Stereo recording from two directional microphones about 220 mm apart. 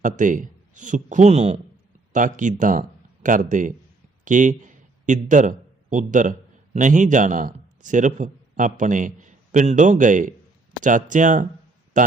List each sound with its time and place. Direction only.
0.0 s a man's voice: 35° right (ahead or behind)